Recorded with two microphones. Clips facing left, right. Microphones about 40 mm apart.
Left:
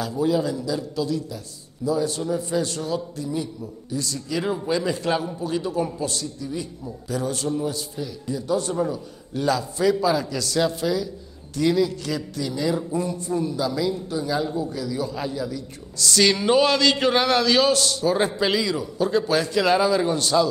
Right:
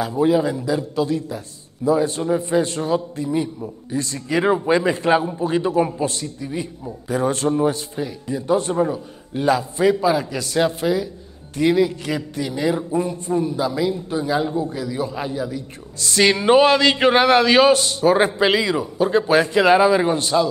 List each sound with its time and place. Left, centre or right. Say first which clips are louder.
0.0 s a man's voice: right 5 dB; right